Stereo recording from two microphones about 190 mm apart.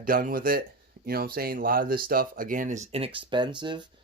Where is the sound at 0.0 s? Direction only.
45° right (ahead or behind).